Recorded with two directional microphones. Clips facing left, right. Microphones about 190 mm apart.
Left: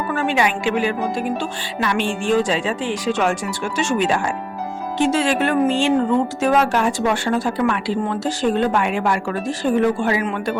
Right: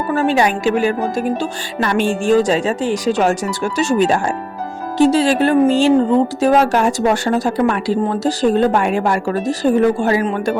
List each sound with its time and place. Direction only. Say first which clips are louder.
0.1 s speech: right 5 dB; 35° right (ahead or behind)